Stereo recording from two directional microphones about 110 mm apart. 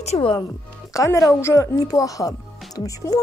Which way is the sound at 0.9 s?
30° left (ahead or behind).